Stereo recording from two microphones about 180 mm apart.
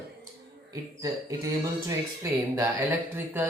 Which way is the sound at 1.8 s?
15° right (ahead or behind).